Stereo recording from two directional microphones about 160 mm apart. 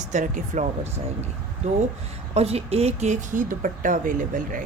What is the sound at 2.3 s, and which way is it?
Speech, 40° right (ahead or behind).